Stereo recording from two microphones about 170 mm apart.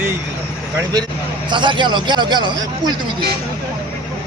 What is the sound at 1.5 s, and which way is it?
A man's voice, 30° right (ahead or behind).